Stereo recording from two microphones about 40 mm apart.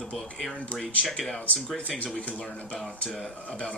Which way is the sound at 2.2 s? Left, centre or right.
Left.